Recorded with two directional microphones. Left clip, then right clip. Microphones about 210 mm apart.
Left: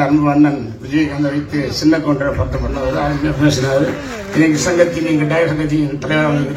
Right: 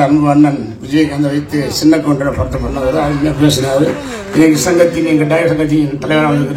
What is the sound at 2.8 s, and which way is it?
Speech, 70° right (ahead or behind).